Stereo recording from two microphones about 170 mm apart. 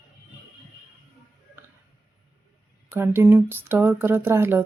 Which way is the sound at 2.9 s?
15° right (ahead or behind).